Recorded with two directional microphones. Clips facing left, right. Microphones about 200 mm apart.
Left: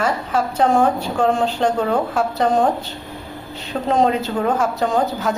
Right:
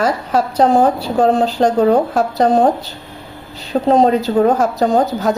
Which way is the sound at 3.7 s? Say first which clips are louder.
Right 5 dB; 35° right (ahead or behind).